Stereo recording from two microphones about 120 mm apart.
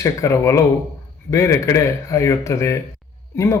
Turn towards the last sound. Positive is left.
turn(degrees=25)  # may be behind; listen again after turning